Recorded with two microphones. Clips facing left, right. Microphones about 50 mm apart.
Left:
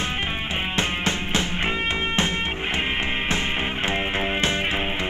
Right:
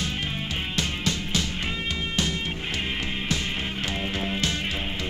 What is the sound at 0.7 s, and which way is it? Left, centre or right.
Music, left.